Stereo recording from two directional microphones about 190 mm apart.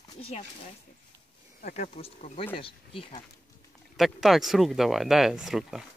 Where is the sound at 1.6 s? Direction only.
40° left (ahead or behind).